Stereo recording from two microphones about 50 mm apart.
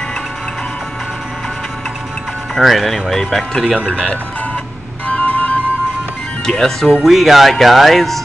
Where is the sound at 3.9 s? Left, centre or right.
Left.